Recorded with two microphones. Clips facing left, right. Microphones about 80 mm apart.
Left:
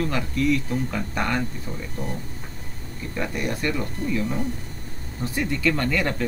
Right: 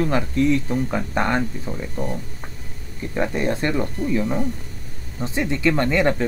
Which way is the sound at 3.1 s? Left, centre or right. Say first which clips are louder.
Right 6 dB; right.